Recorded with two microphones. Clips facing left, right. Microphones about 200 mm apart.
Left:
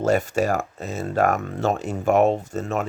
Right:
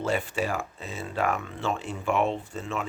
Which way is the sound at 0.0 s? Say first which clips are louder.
Left 7 dB; 45° left (ahead or behind).